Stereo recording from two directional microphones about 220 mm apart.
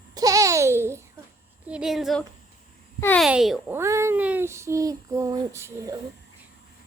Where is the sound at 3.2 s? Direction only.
Centre (ahead or behind).